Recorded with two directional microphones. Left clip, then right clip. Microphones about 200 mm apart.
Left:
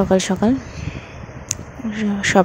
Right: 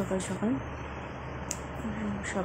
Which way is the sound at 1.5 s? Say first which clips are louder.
Left 12 dB; 30° left (ahead or behind).